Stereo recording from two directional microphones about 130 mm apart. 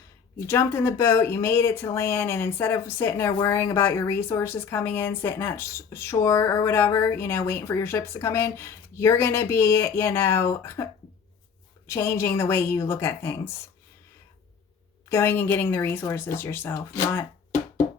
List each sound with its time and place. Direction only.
0.3 s speech: 20° left (ahead or behind)
11.9 s speech: 20° left (ahead or behind)
15.1 s speech: 20° left (ahead or behind)